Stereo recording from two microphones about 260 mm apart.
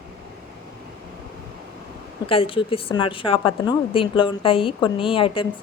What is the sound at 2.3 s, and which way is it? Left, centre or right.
A woman's voice, left.